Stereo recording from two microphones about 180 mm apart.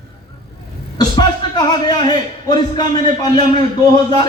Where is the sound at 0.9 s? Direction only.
25° left (ahead or behind).